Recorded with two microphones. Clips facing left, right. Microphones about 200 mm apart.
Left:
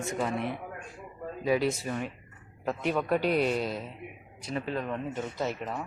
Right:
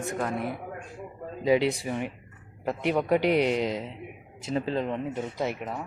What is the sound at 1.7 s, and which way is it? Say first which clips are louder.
Speech: right 2 dB; 15° right (ahead or behind).